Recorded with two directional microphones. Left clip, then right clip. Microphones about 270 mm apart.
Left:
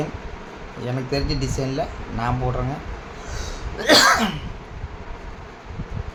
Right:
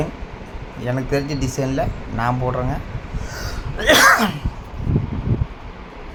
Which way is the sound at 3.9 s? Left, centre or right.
Centre.